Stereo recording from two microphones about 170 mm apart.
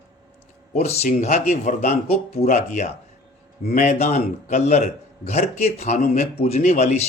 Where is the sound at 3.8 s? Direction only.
40° left (ahead or behind).